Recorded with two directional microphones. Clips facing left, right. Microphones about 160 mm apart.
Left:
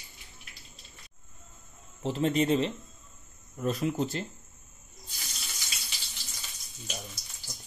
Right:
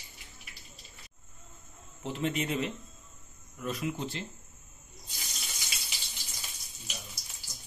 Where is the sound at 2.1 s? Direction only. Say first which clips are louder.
Left 6 dB; 35° left (ahead or behind).